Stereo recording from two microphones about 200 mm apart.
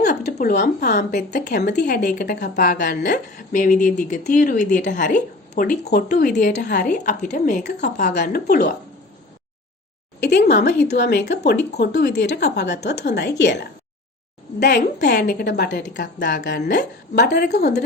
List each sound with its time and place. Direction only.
0.1 s a sound: 35° left (ahead or behind)
0.8 s a woman's voice: 55° left (ahead or behind)
1.5 s a woman's voice: 40° left (ahead or behind)
1.8 s a woman's voice: 55° left (ahead or behind)
10.2 s a woman's voice: 55° left (ahead or behind)
16.5 s a woman's voice: 45° left (ahead or behind)